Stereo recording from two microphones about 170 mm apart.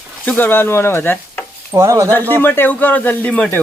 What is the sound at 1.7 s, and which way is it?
Speech, 15° right (ahead or behind).